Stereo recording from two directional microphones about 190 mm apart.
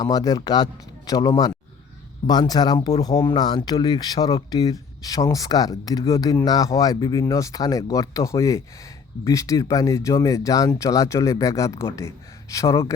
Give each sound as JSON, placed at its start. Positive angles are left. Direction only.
{"t": 0.0, "sound": "speech", "side_deg": 20}